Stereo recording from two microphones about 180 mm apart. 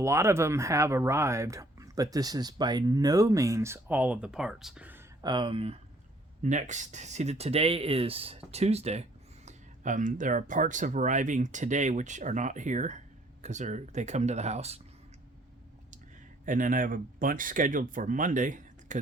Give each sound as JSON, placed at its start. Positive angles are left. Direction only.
{"t": 0.0, "sound": "speech", "side_deg": -15}
{"t": 5.2, "sound": "speech", "side_deg": -25}
{"t": 6.4, "sound": "speech", "side_deg": -45}
{"t": 16.5, "sound": "speech", "side_deg": -50}